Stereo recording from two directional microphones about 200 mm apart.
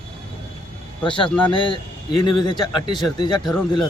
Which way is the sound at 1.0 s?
25° left (ahead or behind).